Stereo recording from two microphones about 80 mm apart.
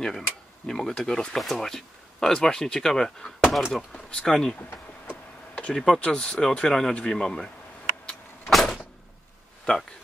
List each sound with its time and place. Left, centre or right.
0.7 s speech: centre
5.5 s a sound: centre
5.8 s speech: centre
8.5 s vehicle: centre
9.7 s speech: centre